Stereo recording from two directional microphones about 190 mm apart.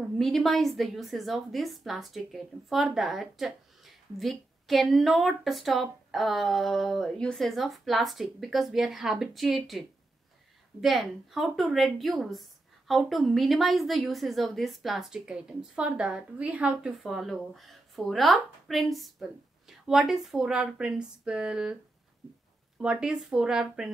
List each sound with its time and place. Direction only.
0.2 s a woman's voice: centre (ahead or behind)
22.8 s a woman's voice: 5° right (ahead or behind)